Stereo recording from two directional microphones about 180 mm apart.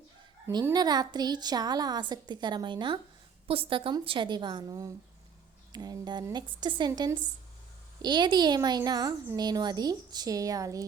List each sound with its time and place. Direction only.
0.4 s a woman's voice: 15° right (ahead or behind)